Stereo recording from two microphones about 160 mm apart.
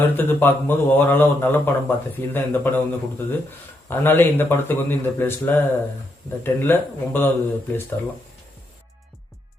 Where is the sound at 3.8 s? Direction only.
15° left (ahead or behind).